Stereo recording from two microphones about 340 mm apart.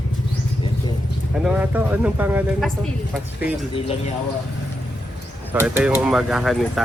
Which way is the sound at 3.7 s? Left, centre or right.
Centre.